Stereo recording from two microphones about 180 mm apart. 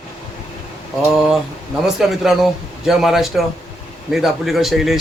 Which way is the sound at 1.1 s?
Centre (ahead or behind).